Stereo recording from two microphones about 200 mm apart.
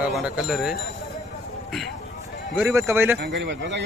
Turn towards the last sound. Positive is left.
turn(degrees=-60)  # may be behind; listen again after turning